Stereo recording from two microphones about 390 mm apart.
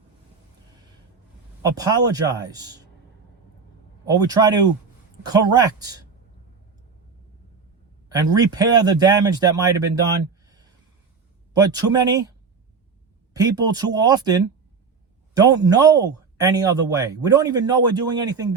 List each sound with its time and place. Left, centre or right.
1.6 s speech: centre
4.0 s speech: centre
8.1 s speech: centre
10.4 s a sound: centre
11.5 s speech: centre
13.3 s speech: centre